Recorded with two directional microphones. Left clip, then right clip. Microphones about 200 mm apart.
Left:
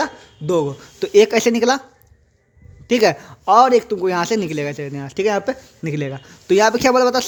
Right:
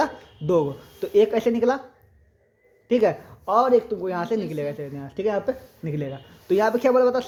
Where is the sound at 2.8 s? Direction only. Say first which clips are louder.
Left 5 dB; 30° left (ahead or behind).